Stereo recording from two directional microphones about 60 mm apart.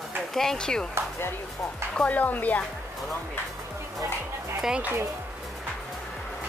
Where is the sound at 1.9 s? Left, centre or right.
Left.